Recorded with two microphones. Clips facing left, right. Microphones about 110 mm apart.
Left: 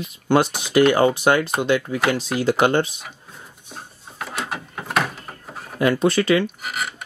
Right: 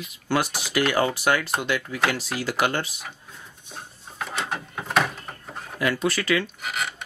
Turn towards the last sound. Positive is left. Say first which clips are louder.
# left 1 dB
turn(degrees=5)  # may be behind; listen again after turning